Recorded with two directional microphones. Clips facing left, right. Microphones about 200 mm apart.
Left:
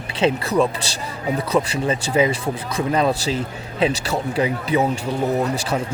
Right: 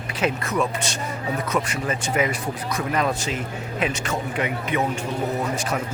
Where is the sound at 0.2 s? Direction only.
30° left (ahead or behind).